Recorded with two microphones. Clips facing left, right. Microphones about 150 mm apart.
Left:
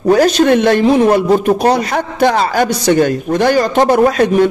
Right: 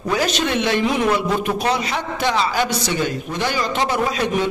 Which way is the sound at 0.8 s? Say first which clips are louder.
Left 9 dB; 35° left (ahead or behind).